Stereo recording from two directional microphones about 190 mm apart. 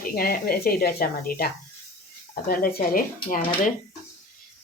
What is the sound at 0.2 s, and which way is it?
Speech, 50° left (ahead or behind).